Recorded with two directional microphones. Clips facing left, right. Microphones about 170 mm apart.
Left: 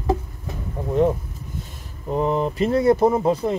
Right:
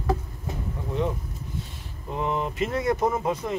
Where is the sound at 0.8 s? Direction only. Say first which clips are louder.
Left 7 dB; 40° left (ahead or behind).